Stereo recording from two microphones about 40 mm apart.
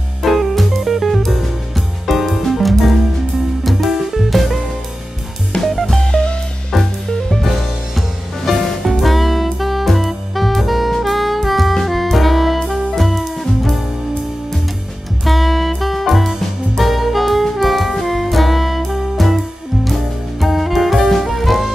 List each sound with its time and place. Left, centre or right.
0.2 s music: centre
5.6 s music: centre
5.9 s music: left
6.7 s music: centre
8.5 s music: centre
15.2 s music: centre